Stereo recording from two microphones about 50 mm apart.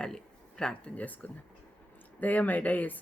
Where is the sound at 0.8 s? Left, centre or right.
Left.